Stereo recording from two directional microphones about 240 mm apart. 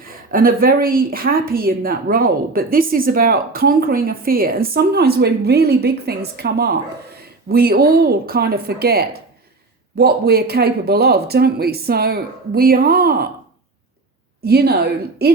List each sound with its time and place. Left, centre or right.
0.0 s a woman's voice: right
14.4 s a woman's voice: right